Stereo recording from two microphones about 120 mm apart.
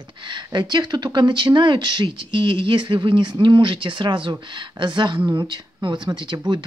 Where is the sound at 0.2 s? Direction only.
40° right (ahead or behind).